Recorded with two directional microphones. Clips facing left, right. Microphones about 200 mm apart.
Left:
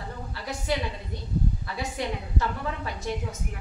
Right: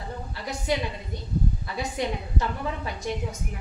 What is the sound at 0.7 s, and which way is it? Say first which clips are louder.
A woman's voice: right 2 dB; 15° right (ahead or behind).